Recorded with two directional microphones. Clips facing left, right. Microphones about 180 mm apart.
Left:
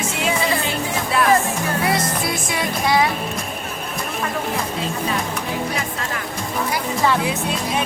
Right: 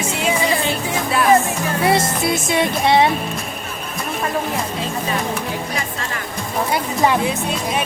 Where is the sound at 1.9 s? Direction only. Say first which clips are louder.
Right 4 dB; 25° right (ahead or behind).